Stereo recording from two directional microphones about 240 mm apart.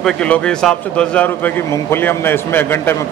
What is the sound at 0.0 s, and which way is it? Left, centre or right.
A man's voice, centre.